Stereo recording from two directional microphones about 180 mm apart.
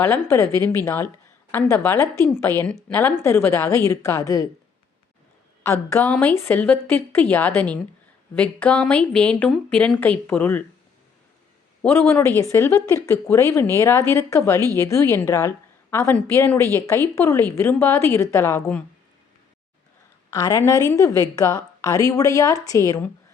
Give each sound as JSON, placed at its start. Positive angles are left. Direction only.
{"t": 0.0, "sound": "speech", "side_deg": 15}
{"t": 5.9, "sound": "speech", "side_deg": 10}
{"t": 11.8, "sound": "a woman's voice", "side_deg": 10}
{"t": 20.3, "sound": "speech", "side_deg": 20}